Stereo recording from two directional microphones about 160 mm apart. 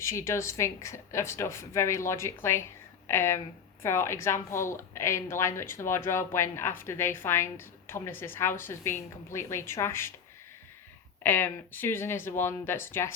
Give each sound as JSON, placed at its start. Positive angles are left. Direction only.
{"t": 0.0, "sound": "a woman's voice", "side_deg": 15}
{"t": 11.2, "sound": "a woman's voice", "side_deg": 10}